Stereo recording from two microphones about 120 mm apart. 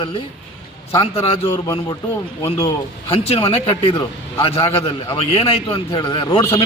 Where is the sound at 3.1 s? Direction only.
55° left (ahead or behind).